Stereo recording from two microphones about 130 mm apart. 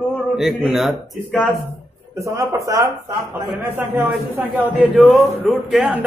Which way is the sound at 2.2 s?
25° right (ahead or behind).